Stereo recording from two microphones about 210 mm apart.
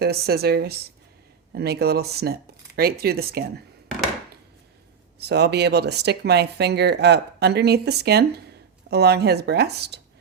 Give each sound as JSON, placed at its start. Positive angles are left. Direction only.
{"t": 0.0, "sound": "speech", "side_deg": -50}
{"t": 5.2, "sound": "speech", "side_deg": -50}